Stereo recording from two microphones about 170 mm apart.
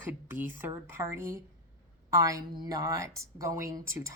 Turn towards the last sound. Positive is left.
turn(degrees=-15)  # may be behind; listen again after turning